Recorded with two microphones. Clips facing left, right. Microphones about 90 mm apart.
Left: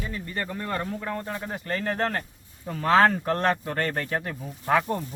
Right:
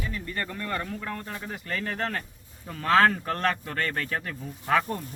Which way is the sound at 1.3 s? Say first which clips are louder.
Left 3 dB; 35° left (ahead or behind).